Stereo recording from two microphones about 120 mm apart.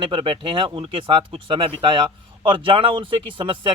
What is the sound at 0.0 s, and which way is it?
Speech, 45° right (ahead or behind).